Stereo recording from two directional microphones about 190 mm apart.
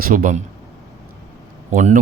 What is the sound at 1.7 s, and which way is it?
Speech, 40° right (ahead or behind).